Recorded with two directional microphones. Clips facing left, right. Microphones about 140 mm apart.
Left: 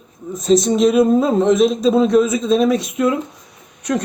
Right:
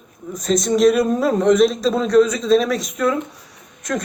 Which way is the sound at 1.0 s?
25° left (ahead or behind).